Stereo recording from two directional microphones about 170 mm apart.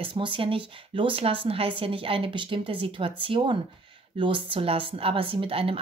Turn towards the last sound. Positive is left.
turn(degrees=-35)  # may be behind; listen again after turning